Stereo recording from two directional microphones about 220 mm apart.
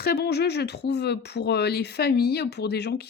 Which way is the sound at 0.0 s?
45° left (ahead or behind).